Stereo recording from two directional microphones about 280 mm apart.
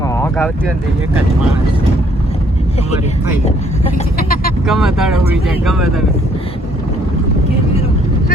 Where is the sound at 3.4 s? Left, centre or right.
Left.